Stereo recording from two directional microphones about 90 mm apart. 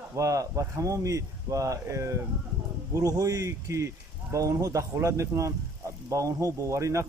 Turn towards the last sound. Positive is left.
turn(degrees=-35)  # may be behind; listen again after turning